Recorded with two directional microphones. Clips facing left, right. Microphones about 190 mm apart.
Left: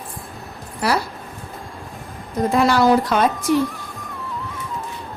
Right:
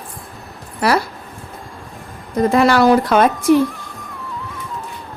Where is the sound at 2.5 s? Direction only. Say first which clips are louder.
Right 3 dB; 70° right (ahead or behind).